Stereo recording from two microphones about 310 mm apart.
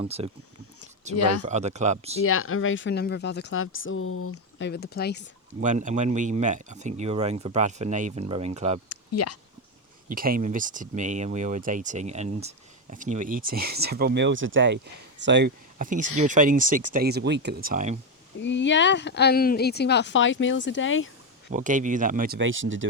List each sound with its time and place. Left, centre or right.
0.0 s speech: centre
1.1 s speech: left
1.4 s speech: right
2.2 s speech: left
5.5 s speech: right
8.9 s a sound: left
10.1 s speech: right
18.3 s speech: left
21.5 s speech: right